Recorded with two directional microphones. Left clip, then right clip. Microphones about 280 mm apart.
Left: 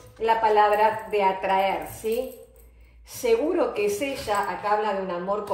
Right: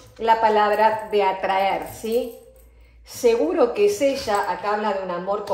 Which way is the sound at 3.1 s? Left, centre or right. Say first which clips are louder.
Right 4 dB; right.